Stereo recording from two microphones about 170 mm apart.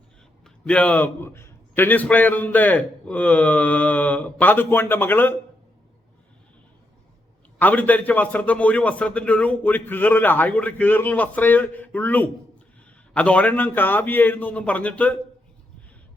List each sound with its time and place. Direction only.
0.4 s a man's voice: 5° left (ahead or behind)
7.6 s a man's voice: 10° left (ahead or behind)